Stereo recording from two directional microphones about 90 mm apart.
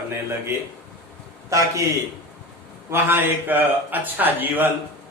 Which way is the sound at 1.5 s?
40° right (ahead or behind).